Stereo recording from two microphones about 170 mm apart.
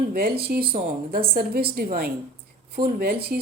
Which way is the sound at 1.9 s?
60° right (ahead or behind).